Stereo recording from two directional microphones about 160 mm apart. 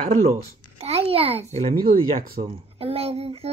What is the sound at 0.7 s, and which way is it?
Babbling, 40° right (ahead or behind).